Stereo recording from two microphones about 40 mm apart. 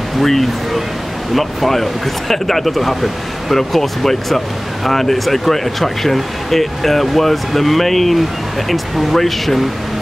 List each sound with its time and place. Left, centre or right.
0.2 s speech: centre